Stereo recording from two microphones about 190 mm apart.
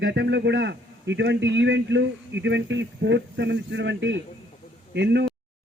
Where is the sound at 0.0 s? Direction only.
65° right (ahead or behind).